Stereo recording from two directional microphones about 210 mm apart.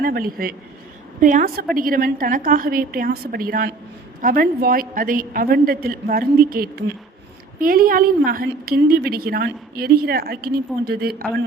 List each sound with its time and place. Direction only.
0.0 s a woman's voice: 45° right (ahead or behind)